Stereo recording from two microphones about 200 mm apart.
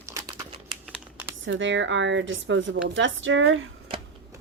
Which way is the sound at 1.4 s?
65° right (ahead or behind).